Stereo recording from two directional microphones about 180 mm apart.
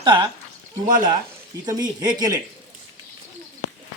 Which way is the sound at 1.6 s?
20° right (ahead or behind).